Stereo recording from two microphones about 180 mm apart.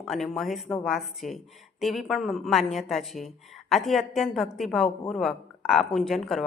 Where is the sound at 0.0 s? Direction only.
Centre (ahead or behind).